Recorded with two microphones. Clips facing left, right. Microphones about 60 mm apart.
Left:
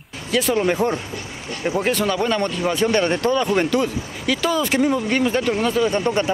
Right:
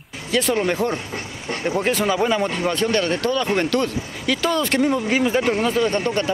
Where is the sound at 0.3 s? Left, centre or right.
Centre.